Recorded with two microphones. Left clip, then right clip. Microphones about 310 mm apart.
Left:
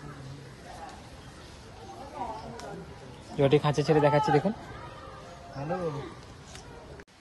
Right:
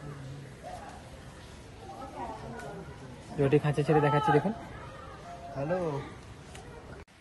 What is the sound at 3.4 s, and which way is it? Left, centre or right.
A man's voice, left.